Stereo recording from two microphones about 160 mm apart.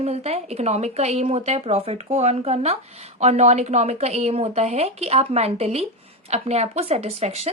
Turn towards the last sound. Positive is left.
turn(degrees=-40)  # may be behind; listen again after turning